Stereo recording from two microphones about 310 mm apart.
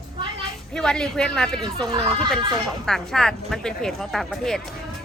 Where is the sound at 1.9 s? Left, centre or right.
Centre.